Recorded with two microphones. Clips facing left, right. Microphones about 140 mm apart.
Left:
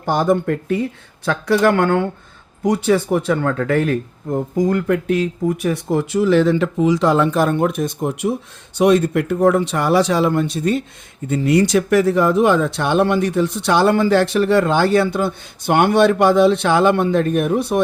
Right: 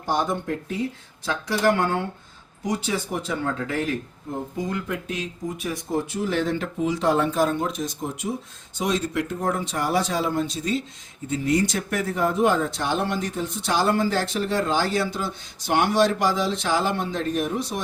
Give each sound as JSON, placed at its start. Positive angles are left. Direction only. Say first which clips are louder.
{"t": 0.0, "sound": "speech", "louder": "left 8 dB", "side_deg": 55}
{"t": 11.3, "sound": "speech", "louder": "left 7 dB", "side_deg": 70}